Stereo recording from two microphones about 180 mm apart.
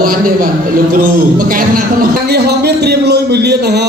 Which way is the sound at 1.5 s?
50° right (ahead or behind).